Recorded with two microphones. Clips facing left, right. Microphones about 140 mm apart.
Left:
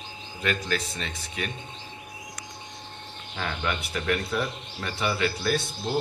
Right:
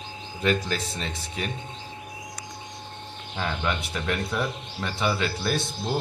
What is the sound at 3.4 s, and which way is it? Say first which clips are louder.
Speech: right 2 dB; 25° right (ahead or behind).